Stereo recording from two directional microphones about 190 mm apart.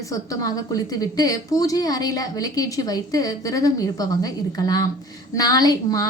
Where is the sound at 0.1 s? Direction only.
20° left (ahead or behind).